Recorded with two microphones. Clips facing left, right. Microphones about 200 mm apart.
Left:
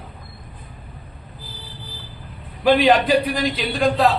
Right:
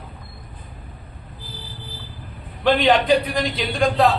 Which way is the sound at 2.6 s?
5° left (ahead or behind).